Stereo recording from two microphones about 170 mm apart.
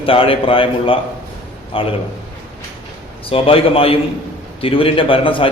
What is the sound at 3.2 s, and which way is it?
A man's voice, 35° left (ahead or behind).